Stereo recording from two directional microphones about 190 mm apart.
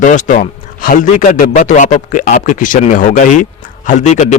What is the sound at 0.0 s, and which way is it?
A man's voice, 40° left (ahead or behind).